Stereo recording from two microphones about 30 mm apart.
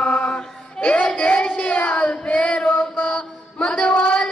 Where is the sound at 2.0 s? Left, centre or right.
Left.